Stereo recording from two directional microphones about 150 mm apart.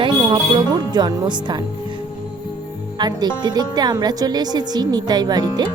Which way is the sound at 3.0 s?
30° right (ahead or behind).